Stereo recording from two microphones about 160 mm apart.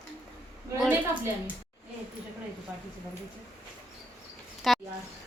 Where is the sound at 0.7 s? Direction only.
15° right (ahead or behind).